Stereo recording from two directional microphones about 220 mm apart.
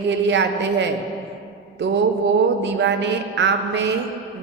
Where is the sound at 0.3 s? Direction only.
55° right (ahead or behind).